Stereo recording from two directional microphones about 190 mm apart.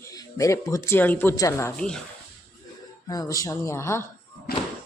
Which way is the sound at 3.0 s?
20° left (ahead or behind).